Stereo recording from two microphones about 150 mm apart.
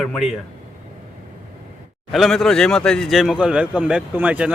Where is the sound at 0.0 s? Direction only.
Centre (ahead or behind).